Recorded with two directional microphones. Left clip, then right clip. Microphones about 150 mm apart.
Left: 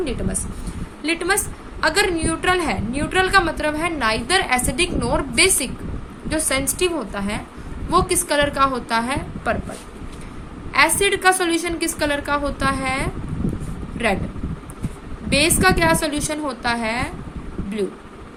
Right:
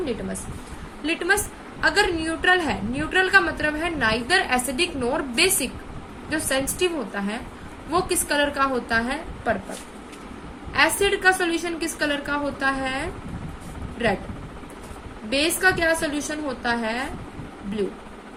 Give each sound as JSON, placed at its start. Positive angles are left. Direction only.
{"t": 1.0, "sound": "a woman's voice", "side_deg": 60}
{"t": 10.7, "sound": "a woman's voice", "side_deg": 55}
{"t": 15.3, "sound": "a woman's voice", "side_deg": 60}